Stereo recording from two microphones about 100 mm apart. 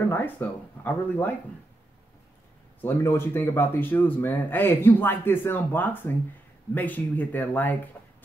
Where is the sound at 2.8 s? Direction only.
25° left (ahead or behind).